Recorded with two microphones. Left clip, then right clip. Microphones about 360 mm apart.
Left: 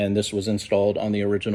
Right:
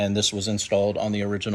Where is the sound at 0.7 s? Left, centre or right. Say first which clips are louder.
Left 1 dB; centre.